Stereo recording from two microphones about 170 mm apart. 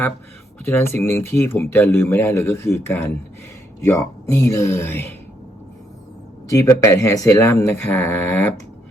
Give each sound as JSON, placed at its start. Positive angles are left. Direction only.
{"t": 0.6, "sound": "speech", "side_deg": 15}
{"t": 6.5, "sound": "speech", "side_deg": 20}